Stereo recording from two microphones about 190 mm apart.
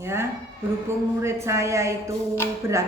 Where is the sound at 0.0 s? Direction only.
15° right (ahead or behind).